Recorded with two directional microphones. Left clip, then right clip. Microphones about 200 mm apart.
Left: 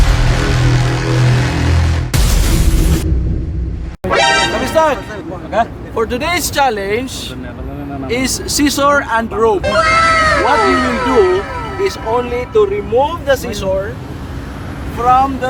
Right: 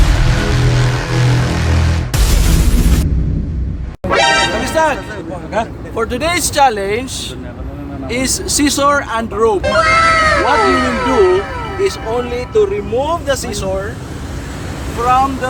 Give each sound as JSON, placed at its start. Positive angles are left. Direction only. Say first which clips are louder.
{"t": 2.4, "sound": "a sound", "louder": "even", "side_deg": 0}
{"t": 4.1, "sound": "music", "louder": "even", "side_deg": 0}
{"t": 5.9, "sound": "speech", "louder": "even", "side_deg": 0}
{"t": 14.9, "sound": "speech", "louder": "left 1 dB", "side_deg": 0}